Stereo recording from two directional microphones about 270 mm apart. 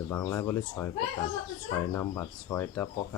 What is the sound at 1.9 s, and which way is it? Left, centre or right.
Speech, centre.